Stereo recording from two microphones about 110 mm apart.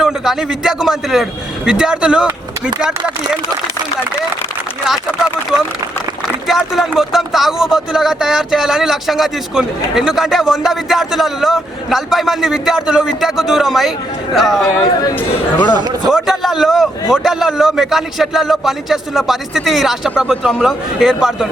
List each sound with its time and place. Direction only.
0.0 s speech: 5° right (ahead or behind)
6.5 s speech: centre (ahead or behind)
15.7 s speech: 40° right (ahead or behind)
16.1 s speech: centre (ahead or behind)